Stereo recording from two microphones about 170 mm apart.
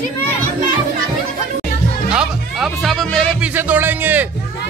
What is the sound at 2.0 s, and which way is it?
A man's voice, 5° right (ahead or behind).